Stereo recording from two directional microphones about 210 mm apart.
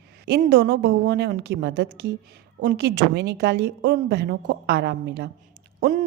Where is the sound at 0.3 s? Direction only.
45° right (ahead or behind).